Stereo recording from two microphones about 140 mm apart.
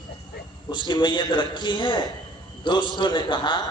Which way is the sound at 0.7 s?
35° left (ahead or behind).